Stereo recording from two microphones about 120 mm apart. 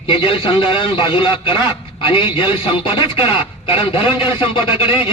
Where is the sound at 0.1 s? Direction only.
50° left (ahead or behind).